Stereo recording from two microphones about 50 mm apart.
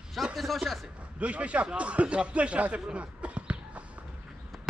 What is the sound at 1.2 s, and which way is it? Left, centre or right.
Speech, right.